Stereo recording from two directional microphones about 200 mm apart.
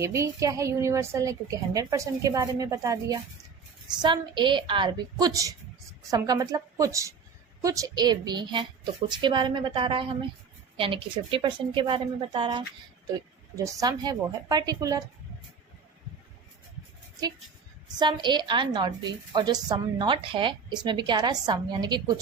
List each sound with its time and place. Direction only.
0.0 s a woman's voice: 15° right (ahead or behind)
13.7 s a woman's voice: 15° right (ahead or behind)
17.8 s a woman's voice: 20° right (ahead or behind)